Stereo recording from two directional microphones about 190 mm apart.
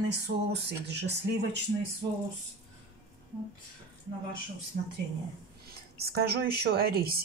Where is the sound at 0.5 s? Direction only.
60° right (ahead or behind).